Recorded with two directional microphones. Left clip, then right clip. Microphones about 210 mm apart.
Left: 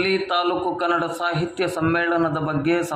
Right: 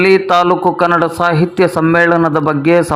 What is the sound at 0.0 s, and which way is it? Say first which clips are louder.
A man's voice: right 11 dB; 30° right (ahead or behind).